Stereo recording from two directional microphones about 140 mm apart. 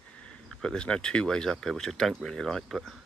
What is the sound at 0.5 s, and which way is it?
Speech, 5° left (ahead or behind).